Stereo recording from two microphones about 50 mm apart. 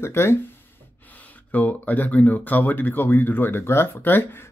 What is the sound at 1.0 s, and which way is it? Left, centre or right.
Speech, left.